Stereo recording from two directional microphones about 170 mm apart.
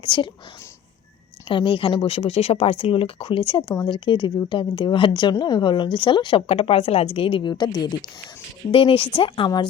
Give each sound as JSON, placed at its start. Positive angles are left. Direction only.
{"t": 0.0, "sound": "speech", "side_deg": 30}
{"t": 1.5, "sound": "speech", "side_deg": 30}
{"t": 3.6, "sound": "speech", "side_deg": 15}
{"t": 3.8, "sound": "speech", "side_deg": 30}